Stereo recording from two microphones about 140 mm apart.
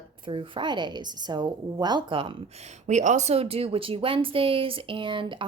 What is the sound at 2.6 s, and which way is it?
A woman's voice, 60° right (ahead or behind).